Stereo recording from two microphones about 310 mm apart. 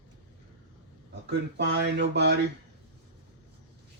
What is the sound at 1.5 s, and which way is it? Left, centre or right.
Speech, right.